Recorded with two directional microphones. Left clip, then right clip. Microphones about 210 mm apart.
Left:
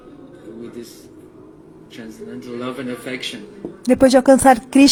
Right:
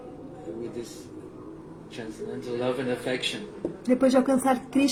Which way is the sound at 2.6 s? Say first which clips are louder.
Even; 55° left (ahead or behind).